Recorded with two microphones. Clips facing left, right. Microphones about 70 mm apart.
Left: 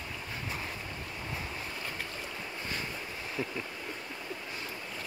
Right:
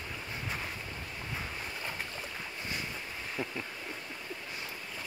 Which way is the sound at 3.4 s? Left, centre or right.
Right.